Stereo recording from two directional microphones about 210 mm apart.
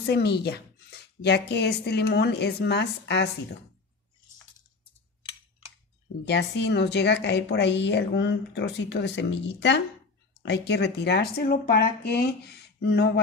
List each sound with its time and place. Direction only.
0.1 s speech: 50° left (ahead or behind)
6.2 s a woman's voice: 55° left (ahead or behind)